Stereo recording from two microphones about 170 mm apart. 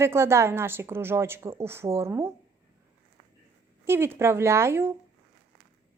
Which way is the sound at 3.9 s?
15° right (ahead or behind).